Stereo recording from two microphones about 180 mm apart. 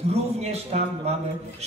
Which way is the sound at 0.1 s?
35° right (ahead or behind).